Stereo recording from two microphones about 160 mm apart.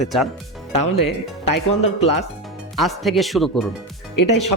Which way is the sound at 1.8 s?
40° left (ahead or behind).